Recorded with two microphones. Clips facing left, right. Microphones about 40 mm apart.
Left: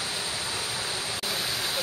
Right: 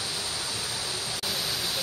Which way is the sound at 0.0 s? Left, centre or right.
Left.